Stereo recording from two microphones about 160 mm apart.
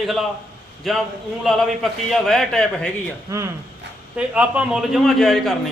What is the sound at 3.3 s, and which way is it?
Speech, 20° right (ahead or behind).